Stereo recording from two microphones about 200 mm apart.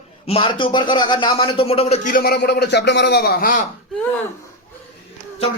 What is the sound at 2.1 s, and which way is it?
A man's voice, 50° left (ahead or behind).